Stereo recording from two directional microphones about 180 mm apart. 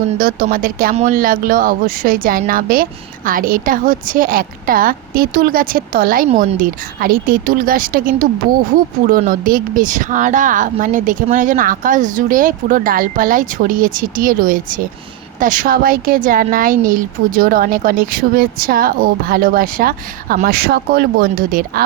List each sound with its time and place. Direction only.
0.2 s speech: 50° right (ahead or behind)